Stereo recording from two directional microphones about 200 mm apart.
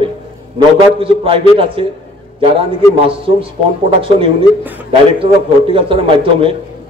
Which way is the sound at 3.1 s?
25° right (ahead or behind).